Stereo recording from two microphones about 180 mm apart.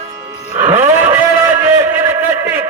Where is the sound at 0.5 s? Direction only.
15° right (ahead or behind).